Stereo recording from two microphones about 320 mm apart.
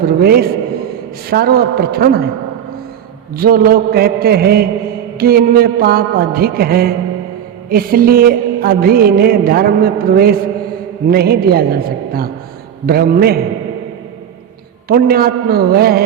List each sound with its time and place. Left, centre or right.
0.0 s music: right
3.3 s music: right
14.8 s music: right